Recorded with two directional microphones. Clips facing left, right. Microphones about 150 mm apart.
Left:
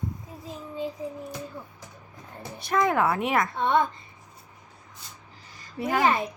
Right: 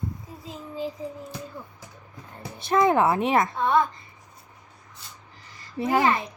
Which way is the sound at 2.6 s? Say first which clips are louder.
Right 3 dB; 25° right (ahead or behind).